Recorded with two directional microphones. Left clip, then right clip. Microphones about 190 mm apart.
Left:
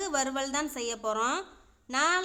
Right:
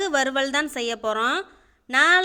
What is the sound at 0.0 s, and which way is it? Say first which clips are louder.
A woman's voice: right 8 dB; 20° right (ahead or behind).